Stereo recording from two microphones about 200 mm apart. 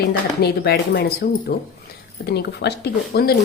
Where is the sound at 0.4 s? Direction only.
50° left (ahead or behind).